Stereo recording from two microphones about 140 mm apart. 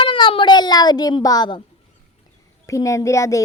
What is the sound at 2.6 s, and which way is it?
Speech, 25° left (ahead or behind).